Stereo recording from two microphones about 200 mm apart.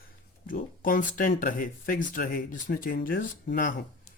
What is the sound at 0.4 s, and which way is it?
Speech, 45° left (ahead or behind).